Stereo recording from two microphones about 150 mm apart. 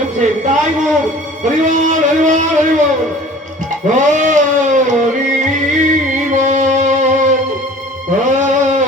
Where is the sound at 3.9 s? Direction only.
55° right (ahead or behind).